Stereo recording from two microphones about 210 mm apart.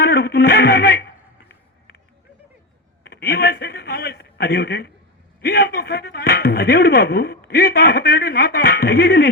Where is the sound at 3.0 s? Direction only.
50° left (ahead or behind).